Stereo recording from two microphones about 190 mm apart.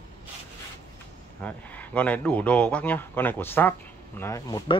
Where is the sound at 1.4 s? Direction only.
5° left (ahead or behind).